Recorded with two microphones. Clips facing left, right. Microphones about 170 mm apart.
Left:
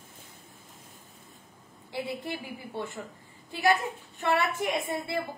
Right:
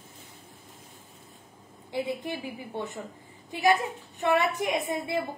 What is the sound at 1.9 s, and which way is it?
A woman's voice, 20° right (ahead or behind).